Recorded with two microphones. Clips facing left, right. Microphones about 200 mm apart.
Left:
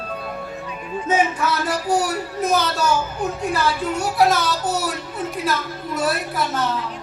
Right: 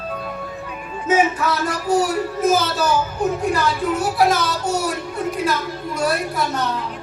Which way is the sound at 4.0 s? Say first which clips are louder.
Left 1 dB; centre (ahead or behind).